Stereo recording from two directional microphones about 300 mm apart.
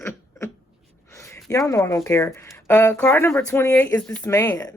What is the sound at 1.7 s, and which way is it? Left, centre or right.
Speech, centre.